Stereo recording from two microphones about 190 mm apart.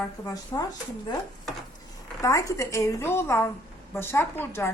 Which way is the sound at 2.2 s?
15° left (ahead or behind).